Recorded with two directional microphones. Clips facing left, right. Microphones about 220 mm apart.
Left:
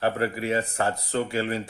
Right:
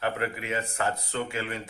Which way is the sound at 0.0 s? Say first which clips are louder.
Left 5 dB; 35° left (ahead or behind).